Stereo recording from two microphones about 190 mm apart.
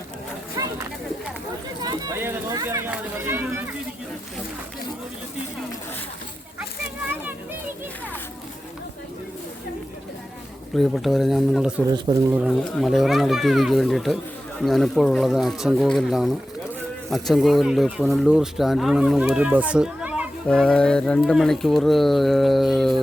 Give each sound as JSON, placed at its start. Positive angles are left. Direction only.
{"t": 0.5, "sound": "a sound", "side_deg": -15}
{"t": 10.8, "sound": "speech", "side_deg": 0}
{"t": 20.5, "sound": "speech", "side_deg": 5}